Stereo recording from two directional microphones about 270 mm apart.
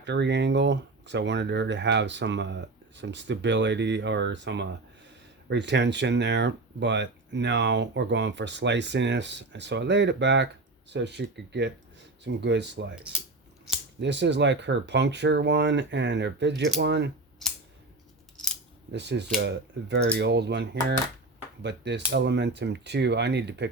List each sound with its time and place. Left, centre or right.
0.0 s speech: right
14.0 s speech: right
18.9 s speech: right